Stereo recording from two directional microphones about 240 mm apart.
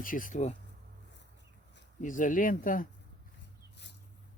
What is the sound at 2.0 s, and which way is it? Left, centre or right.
Speech, left.